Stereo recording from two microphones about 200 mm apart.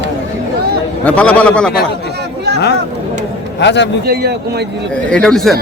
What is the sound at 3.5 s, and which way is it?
Speech, 60° left (ahead or behind).